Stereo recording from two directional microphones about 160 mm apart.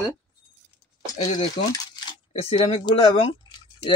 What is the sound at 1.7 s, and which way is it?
Coin, 25° left (ahead or behind).